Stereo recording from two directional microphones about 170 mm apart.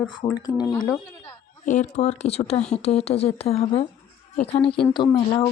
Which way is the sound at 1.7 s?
45° left (ahead or behind).